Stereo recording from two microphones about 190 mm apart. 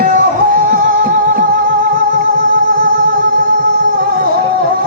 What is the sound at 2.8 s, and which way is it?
Music, 50° right (ahead or behind).